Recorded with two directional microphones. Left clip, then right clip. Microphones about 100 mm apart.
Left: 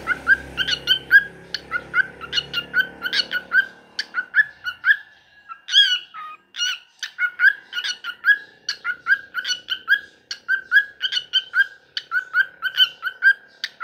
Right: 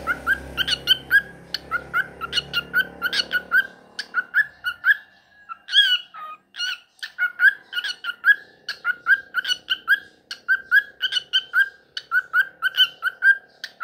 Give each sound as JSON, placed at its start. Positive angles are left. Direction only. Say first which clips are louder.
{"t": 0.0, "sound": "music", "louder": "left 4 dB", "side_deg": -60}
{"t": 6.1, "sound": "chicken", "louder": "left 3 dB", "side_deg": -30}
{"t": 7.2, "sound": "bird", "louder": "even", "side_deg": -35}
{"t": 11.6, "sound": "bird", "louder": "even", "side_deg": -45}
{"t": 13.2, "sound": "bird", "louder": "left 1 dB", "side_deg": -20}